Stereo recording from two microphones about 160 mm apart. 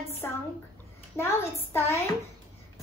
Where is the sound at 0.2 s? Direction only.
10° left (ahead or behind).